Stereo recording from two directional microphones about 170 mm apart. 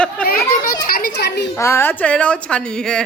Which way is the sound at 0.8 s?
65° left (ahead or behind).